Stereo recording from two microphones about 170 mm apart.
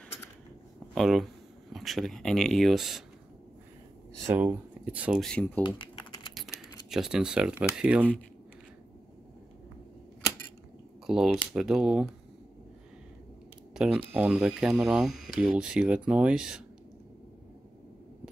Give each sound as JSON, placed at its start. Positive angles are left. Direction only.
{"t": 0.9, "sound": "speech", "side_deg": 0}
{"t": 4.3, "sound": "speech", "side_deg": -10}
{"t": 5.2, "sound": "speech", "side_deg": 5}
{"t": 5.6, "sound": "typing", "side_deg": 25}
{"t": 6.9, "sound": "speech", "side_deg": -5}
{"t": 11.1, "sound": "speech", "side_deg": -5}
{"t": 13.8, "sound": "speech", "side_deg": -5}